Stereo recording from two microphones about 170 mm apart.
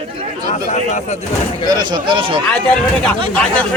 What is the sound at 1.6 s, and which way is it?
Speech, 25° right (ahead or behind).